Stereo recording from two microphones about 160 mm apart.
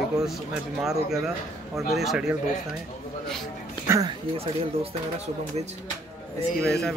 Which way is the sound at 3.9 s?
25° right (ahead or behind).